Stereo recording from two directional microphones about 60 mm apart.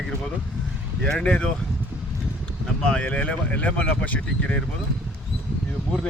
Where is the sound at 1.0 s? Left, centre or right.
Centre.